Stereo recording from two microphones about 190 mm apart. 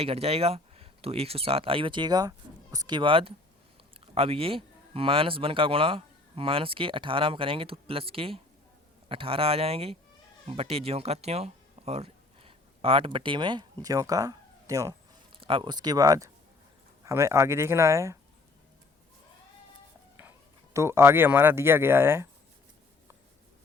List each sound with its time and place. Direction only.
0.0 s speech: 30° right (ahead or behind); by 14.9 s 15° right (ahead or behind)
15.4 s speech: 25° right (ahead or behind)
20.7 s speech: 15° right (ahead or behind)